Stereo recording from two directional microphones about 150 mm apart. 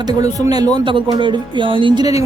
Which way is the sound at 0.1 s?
25° right (ahead or behind).